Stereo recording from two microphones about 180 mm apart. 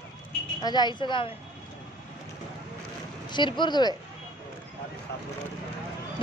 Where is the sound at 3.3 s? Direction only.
25° left (ahead or behind).